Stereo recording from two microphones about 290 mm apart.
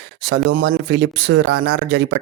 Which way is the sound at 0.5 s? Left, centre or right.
Right.